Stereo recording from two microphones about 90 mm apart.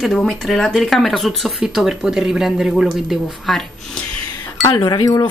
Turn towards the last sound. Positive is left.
turn(degrees=45)  # may be behind; listen again after turning